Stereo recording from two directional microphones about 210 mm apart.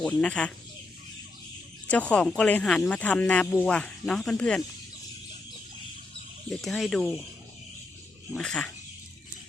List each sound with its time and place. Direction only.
0.0 s speech: 5° left (ahead or behind)
1.9 s speech: 5° left (ahead or behind)
6.5 s speech: centre (ahead or behind)
8.3 s speech: 5° left (ahead or behind)